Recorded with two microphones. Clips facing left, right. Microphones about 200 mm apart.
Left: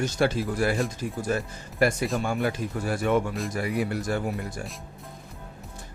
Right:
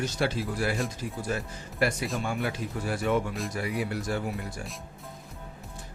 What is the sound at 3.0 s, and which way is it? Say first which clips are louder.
Speech: left 3 dB; 55° left (ahead or behind).